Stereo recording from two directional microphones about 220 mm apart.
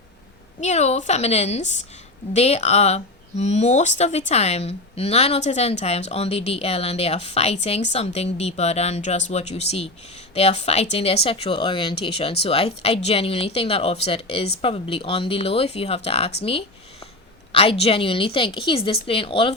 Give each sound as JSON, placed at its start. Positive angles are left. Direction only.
{"t": 0.6, "sound": "a woman's voice", "side_deg": 30}
{"t": 16.4, "sound": "a sound", "side_deg": 25}
{"t": 17.5, "sound": "speech", "side_deg": 25}